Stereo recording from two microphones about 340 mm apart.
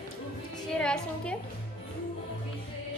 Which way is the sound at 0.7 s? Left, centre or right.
Centre.